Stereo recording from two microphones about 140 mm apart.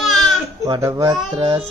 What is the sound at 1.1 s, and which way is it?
Child singing, 35° right (ahead or behind).